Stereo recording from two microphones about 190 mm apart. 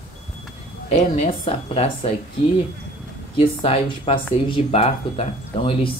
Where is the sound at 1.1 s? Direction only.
30° left (ahead or behind).